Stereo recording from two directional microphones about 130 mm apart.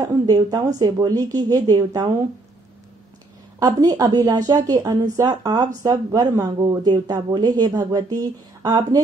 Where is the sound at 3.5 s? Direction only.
30° right (ahead or behind).